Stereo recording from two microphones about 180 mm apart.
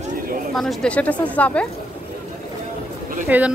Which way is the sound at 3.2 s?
10° right (ahead or behind).